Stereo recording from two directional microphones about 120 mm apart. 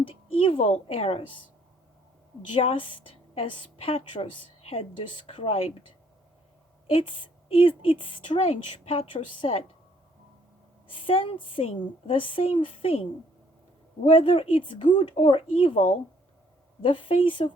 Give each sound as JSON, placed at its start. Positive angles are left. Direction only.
{"t": 0.1, "sound": "a sound", "side_deg": 50}
{"t": 0.9, "sound": "a woman's voice", "side_deg": 55}
{"t": 2.6, "sound": "a woman's voice", "side_deg": 45}
{"t": 6.9, "sound": "a woman's voice", "side_deg": 50}
{"t": 8.4, "sound": "a woman's voice", "side_deg": 55}
{"t": 10.8, "sound": "a woman's voice", "side_deg": 45}
{"t": 14.2, "sound": "a woman's voice", "side_deg": 50}
{"t": 16.8, "sound": "a woman's voice", "side_deg": 45}